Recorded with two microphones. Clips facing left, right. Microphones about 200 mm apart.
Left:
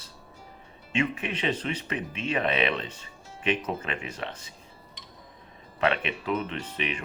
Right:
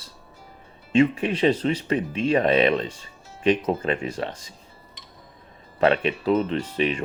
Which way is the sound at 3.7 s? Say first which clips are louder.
Right 8 dB; 35° right (ahead or behind).